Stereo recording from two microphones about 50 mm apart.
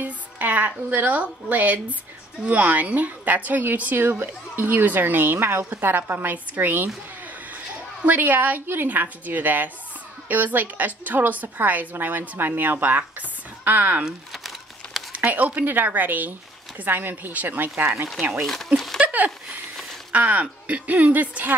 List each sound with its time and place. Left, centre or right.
0.0 s a woman's voice: right
15.1 s a woman's voice: right
18.9 s a sound: right
20.1 s a woman's voice: right